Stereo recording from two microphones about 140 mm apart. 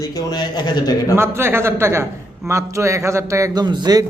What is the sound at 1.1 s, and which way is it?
A man's voice, 15° right (ahead or behind).